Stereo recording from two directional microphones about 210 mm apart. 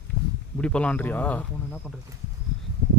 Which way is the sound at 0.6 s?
5° left (ahead or behind).